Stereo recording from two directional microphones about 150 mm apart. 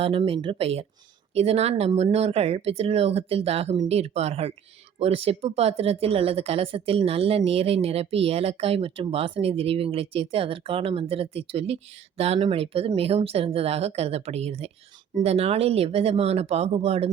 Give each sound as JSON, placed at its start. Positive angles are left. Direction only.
{"t": 0.0, "sound": "speech", "side_deg": -35}